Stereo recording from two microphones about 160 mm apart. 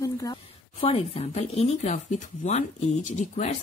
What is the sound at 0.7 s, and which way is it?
A woman's voice, 35° left (ahead or behind).